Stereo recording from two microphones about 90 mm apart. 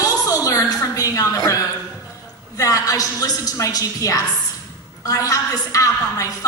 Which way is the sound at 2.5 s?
40° left (ahead or behind).